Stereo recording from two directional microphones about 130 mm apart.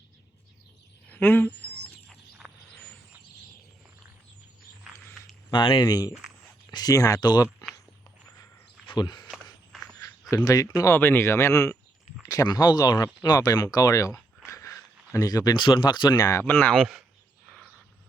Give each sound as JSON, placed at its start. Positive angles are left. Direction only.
{"t": 1.1, "sound": "a sound", "side_deg": 15}
{"t": 2.7, "sound": "a sound", "side_deg": 10}
{"t": 5.5, "sound": "speech", "side_deg": 35}
{"t": 9.0, "sound": "speech", "side_deg": 35}
{"t": 9.7, "sound": "walk", "side_deg": 0}
{"t": 10.3, "sound": "speech", "side_deg": 25}
{"t": 16.4, "sound": "speech", "side_deg": 15}
{"t": 16.7, "sound": "a man's voice", "side_deg": 0}
{"t": 17.4, "sound": "a sound", "side_deg": 5}